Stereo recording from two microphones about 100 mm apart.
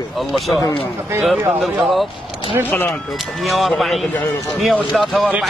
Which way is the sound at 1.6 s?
Centre (ahead or behind).